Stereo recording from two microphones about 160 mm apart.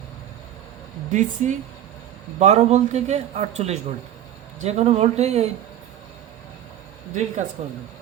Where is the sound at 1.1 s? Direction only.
50° right (ahead or behind).